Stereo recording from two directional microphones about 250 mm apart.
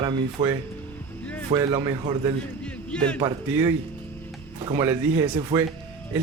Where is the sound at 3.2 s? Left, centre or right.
Centre.